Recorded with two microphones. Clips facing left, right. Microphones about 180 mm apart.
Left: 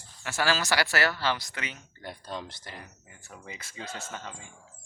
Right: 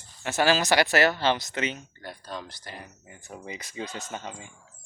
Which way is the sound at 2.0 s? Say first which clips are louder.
Left 4 dB; 20° left (ahead or behind).